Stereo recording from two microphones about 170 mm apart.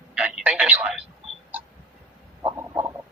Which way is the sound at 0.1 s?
5° right (ahead or behind).